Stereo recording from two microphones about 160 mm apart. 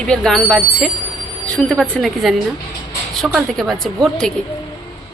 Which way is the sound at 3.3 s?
Centre (ahead or behind).